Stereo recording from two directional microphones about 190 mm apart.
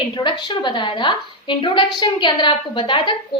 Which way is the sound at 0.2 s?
25° left (ahead or behind).